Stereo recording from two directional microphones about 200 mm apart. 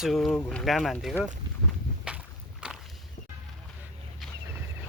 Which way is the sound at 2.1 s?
5° right (ahead or behind).